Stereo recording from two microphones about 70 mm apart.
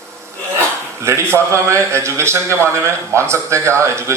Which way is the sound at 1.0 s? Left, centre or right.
Right.